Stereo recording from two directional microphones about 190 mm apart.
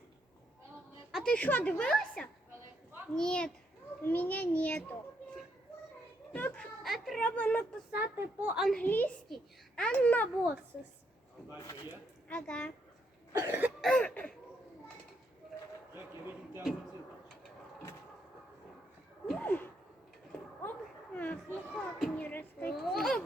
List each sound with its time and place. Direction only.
1.1 s a child's voice: 5° left (ahead or behind)
6.3 s speech: 5° left (ahead or behind)
7.9 s a child's voice: 10° right (ahead or behind); by 10.2 s 10° left (ahead or behind)
11.5 s a child's voice: 15° left (ahead or behind)
12.3 s a child's voice: 5° left (ahead or behind)
13.4 s cough: 10° right (ahead or behind)
13.8 s a child's voice: 5° left (ahead or behind)
19.3 s a sound: 10° left (ahead or behind)